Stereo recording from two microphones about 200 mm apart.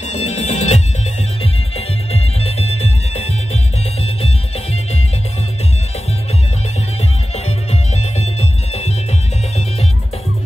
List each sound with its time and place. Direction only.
0.1 s music: 35° left (ahead or behind)
2.1 s music: 30° left (ahead or behind)
8.2 s music: 30° left (ahead or behind)